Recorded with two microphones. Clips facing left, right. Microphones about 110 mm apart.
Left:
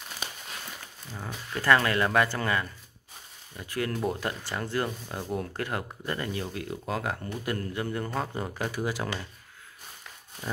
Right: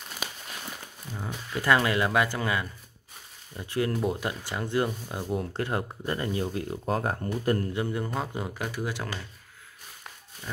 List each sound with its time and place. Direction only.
1.1 s a man's voice: 5° right (ahead or behind)
3.5 s speech: 20° right (ahead or behind)
3.9 s a man's voice: 5° right (ahead or behind)
4.2 s speech: 15° right (ahead or behind)
5.5 s speech: 25° right (ahead or behind)
7.7 s a man's voice: 15° right (ahead or behind); by 9.1 s 5° left (ahead or behind)